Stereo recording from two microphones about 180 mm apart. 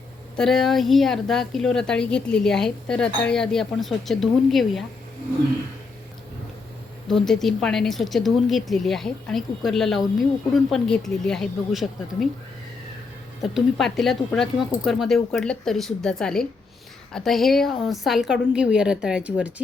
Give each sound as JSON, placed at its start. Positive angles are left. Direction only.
{"t": 0.3, "sound": "a woman's voice", "side_deg": 0}
{"t": 7.1, "sound": "a woman's voice", "side_deg": 0}
{"t": 13.4, "sound": "a woman's voice", "side_deg": 0}